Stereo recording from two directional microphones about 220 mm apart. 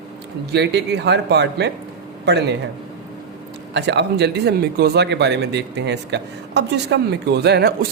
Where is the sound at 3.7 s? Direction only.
50° right (ahead or behind).